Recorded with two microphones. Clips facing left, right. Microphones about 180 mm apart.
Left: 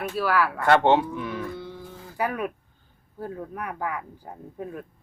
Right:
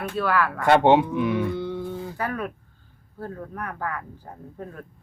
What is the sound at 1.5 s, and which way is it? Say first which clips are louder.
Toothbrush: right 9 dB; 70° right (ahead or behind).